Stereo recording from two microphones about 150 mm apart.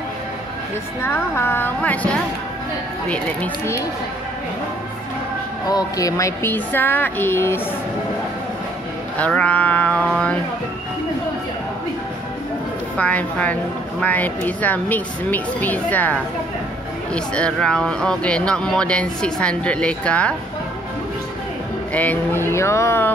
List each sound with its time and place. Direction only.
1.0 s speech: 15° left (ahead or behind)
3.1 s speech: 15° left (ahead or behind)
5.7 s speech: 25° left (ahead or behind)
9.2 s speech: 10° left (ahead or behind)
12.9 s speech: 10° left (ahead or behind)
21.9 s speech: 10° left (ahead or behind)